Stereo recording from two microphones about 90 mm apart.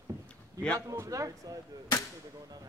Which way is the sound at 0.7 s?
35° right (ahead or behind).